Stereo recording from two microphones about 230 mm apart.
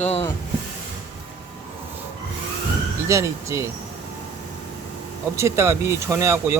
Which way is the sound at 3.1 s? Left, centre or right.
Centre.